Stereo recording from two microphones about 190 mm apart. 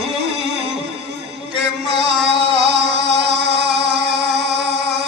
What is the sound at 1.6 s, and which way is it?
Music, 60° right (ahead or behind).